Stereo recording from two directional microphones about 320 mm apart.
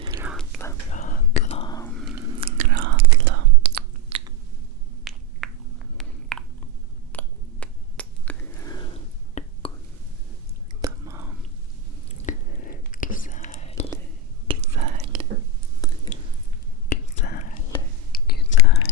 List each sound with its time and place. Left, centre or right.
0.0 s whispering: centre
0.9 s whispering: left
2.4 s whispering: right
4.1 s finger snapping: centre
5.1 s a sound: centre
7.1 s finger snapping: centre
10.8 s whispering: centre
12.2 s whispering: left
14.4 s whispering: centre
15.8 s chewing: centre
16.9 s whispering: left
18.1 s whispering: left